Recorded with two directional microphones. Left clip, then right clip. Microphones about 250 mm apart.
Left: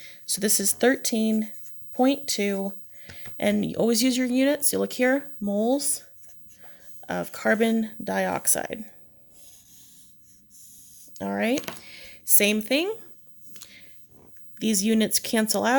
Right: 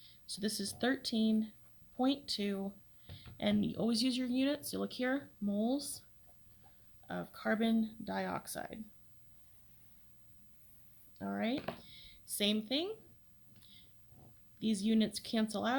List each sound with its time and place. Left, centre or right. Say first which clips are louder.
0.0 s speech: left 13 dB; left
7.1 s speech: left 13 dB; left
11.1 s speech: left 12 dB; left
14.6 s speech: left 11 dB; left